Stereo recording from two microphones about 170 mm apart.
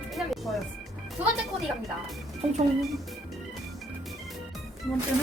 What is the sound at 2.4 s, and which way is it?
Speech, 40° right (ahead or behind).